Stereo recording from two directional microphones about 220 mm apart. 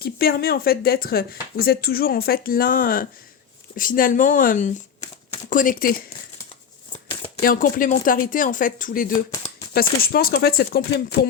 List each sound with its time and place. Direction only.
0.0 s speech: 45° left (ahead or behind)
7.1 s shuffling cards: 25° left (ahead or behind)
7.4 s speech: 40° left (ahead or behind)